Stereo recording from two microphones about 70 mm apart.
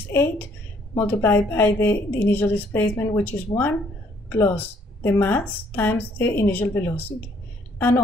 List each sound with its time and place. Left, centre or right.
0.1 s a woman's voice: left